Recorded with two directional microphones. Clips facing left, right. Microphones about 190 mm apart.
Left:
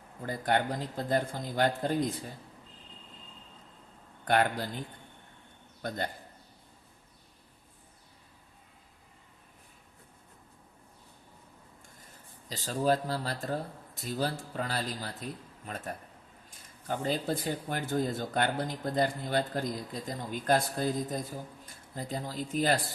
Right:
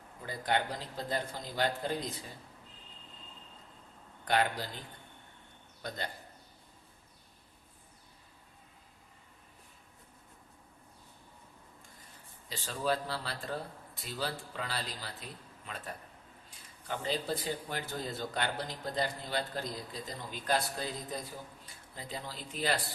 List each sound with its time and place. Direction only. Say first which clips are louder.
0.2 s speech: left 4 dB; 50° left (ahead or behind)
4.3 s speech: left 3 dB; 50° left (ahead or behind)
5.8 s speech: left 5 dB; 50° left (ahead or behind)
12.5 s speech: left 5 dB; 40° left (ahead or behind)